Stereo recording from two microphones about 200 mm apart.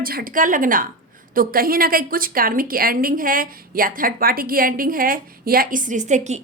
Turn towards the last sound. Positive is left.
turn(degrees=-35)  # may be behind; listen again after turning